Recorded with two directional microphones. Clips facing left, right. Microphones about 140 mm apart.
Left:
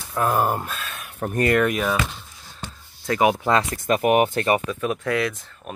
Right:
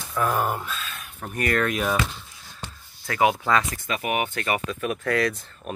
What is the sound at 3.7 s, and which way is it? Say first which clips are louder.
Speech: left 8 dB; 45° left (ahead or behind).